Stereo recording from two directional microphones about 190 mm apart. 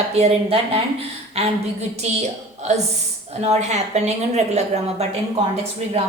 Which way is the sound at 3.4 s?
35° right (ahead or behind).